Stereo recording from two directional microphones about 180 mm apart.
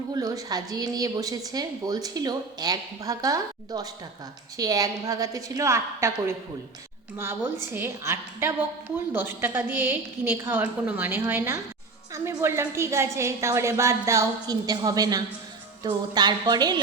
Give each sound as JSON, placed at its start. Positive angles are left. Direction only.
{"t": 0.1, "sound": "speech", "side_deg": -20}
{"t": 7.6, "sound": "a woman's voice", "side_deg": -15}